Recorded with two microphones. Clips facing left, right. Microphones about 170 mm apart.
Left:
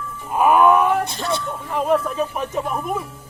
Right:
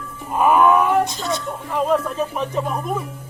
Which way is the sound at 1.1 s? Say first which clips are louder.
Even; 65° left (ahead or behind).